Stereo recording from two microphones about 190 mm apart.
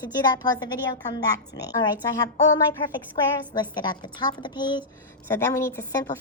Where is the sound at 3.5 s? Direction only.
25° left (ahead or behind).